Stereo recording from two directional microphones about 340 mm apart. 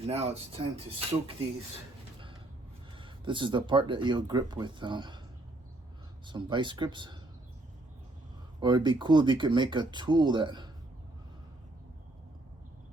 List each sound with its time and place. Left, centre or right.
0.0 s speech: centre
2.9 s speech: centre
6.2 s speech: centre
8.6 s speech: centre